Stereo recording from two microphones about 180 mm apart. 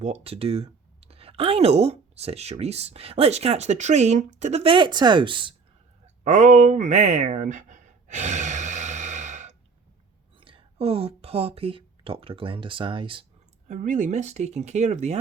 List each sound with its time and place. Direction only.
0.0 s speech: 35° right (ahead or behind)
6.2 s a sound: 40° right (ahead or behind)
10.4 s speech: 30° right (ahead or behind)
13.7 s speech: 45° right (ahead or behind)